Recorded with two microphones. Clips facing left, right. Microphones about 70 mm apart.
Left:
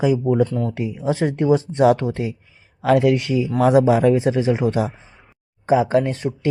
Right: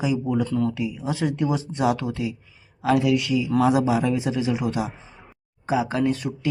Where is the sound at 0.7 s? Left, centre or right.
Left.